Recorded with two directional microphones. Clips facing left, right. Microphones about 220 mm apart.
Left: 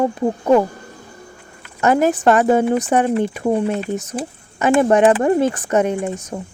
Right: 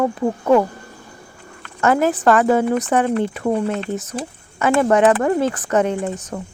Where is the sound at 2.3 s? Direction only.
20° left (ahead or behind).